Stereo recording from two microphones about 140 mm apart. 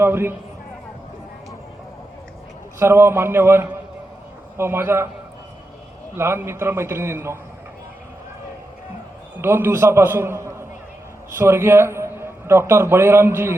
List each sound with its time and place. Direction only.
0.0 s a man's voice: 15° right (ahead or behind)
2.7 s a man's voice: 15° right (ahead or behind)
6.1 s a man's voice: 15° right (ahead or behind)
9.4 s a man's voice: 15° right (ahead or behind)